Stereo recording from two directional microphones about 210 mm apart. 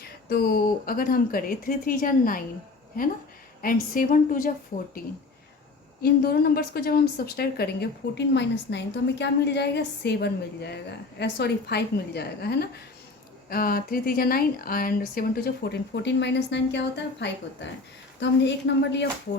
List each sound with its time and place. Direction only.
0.0 s a woman's voice: 45° left (ahead or behind)
6.0 s a woman's voice: 45° left (ahead or behind)
15.7 s a woman's voice: 55° left (ahead or behind)